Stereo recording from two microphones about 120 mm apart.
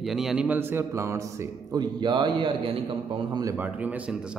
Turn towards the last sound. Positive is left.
turn(degrees=-15)  # may be behind; listen again after turning